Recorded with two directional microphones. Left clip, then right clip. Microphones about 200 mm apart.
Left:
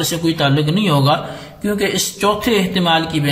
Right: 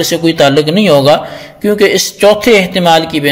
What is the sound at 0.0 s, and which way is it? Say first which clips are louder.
A man's voice: right 9 dB; 40° right (ahead or behind).